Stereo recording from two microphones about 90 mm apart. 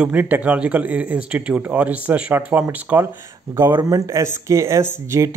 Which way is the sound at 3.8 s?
45° right (ahead or behind).